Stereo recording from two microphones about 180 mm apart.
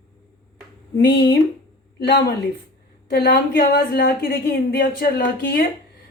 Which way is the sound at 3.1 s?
60° left (ahead or behind).